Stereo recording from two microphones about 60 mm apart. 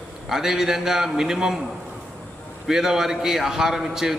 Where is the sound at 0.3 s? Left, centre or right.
Centre.